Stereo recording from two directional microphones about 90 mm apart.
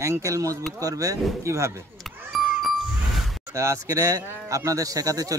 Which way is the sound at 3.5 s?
35° right (ahead or behind).